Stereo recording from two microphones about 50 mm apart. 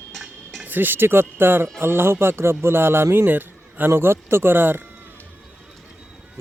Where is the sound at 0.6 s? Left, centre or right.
Right.